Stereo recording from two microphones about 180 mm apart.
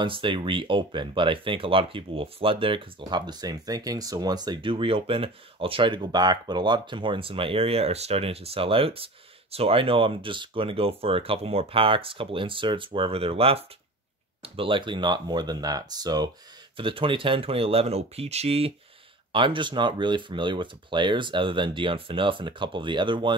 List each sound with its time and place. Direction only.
0.0 s speech: 30° right (ahead or behind)